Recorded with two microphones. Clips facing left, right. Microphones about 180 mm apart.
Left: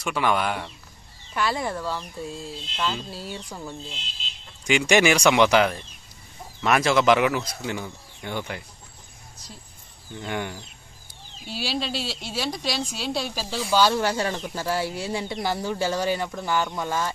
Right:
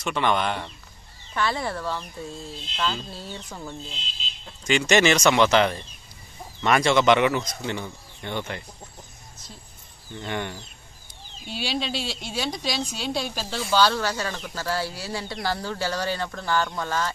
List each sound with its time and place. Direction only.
0.0 s a woman's voice: 5° left (ahead or behind)
10.1 s a woman's voice: 5° left (ahead or behind)
13.7 s speech: 15° left (ahead or behind)